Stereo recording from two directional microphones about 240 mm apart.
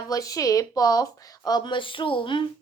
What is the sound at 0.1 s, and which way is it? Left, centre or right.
Speech, centre.